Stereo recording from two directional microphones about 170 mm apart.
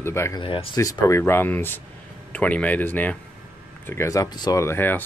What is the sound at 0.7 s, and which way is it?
Speech, 20° left (ahead or behind).